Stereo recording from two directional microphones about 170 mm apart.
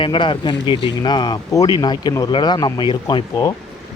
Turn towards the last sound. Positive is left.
turn(degrees=25)  # may be behind; listen again after turning